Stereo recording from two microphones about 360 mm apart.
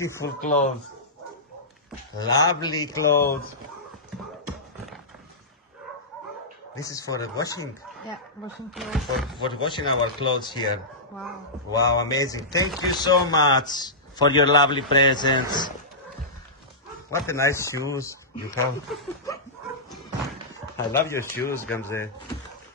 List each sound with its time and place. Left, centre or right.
0.0 s speech: centre
0.4 s speech: left
2.1 s speech: centre
6.7 s speech: centre
8.7 s speech: centre
9.5 s speech: centre
11.7 s speech: centre
17.1 s speech: centre
20.7 s speech: centre